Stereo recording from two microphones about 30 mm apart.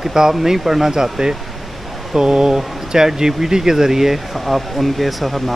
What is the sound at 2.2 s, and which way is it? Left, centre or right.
Speech, right.